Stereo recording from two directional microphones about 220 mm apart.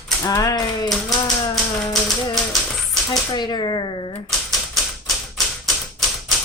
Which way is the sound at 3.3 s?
20° left (ahead or behind).